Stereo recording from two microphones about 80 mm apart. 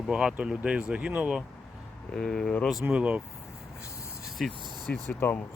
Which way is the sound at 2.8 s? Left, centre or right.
Centre.